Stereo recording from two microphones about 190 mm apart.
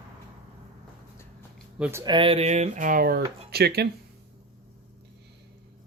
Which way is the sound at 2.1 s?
30° right (ahead or behind).